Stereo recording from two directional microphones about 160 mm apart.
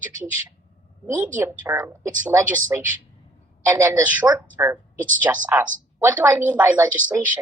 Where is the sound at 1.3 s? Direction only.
10° right (ahead or behind).